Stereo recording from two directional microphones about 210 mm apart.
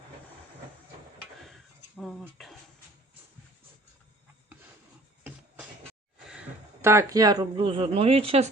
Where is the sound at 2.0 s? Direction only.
Centre (ahead or behind).